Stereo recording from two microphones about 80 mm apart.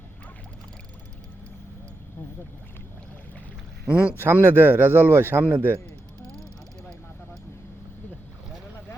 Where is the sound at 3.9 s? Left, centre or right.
Centre.